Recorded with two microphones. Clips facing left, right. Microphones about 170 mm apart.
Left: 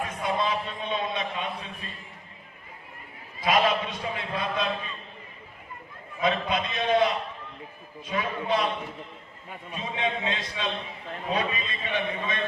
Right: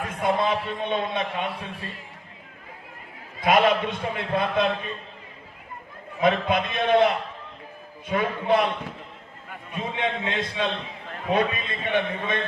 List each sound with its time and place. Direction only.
0.0 s speech: 55° right (ahead or behind)
3.4 s a man's voice: 55° right (ahead or behind)
6.2 s a man's voice: 55° right (ahead or behind)
9.7 s a man's voice: 55° right (ahead or behind)